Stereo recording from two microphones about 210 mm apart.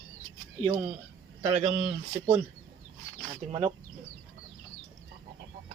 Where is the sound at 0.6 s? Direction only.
30° right (ahead or behind).